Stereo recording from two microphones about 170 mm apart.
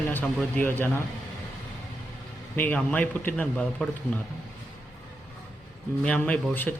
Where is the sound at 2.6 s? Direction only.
5° left (ahead or behind).